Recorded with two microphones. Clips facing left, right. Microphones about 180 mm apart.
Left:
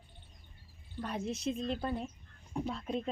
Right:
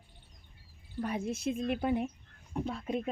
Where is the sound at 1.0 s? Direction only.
10° right (ahead or behind).